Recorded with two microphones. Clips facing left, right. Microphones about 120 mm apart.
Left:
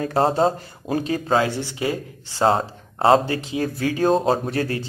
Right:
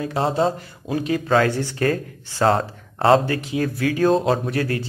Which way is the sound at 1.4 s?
20° left (ahead or behind).